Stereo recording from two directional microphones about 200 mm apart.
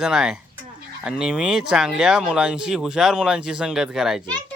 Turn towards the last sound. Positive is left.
turn(degrees=0)  # may be behind; listen again after turning